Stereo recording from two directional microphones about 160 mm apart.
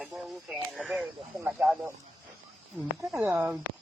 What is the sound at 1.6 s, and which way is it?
Speech, 5° right (ahead or behind).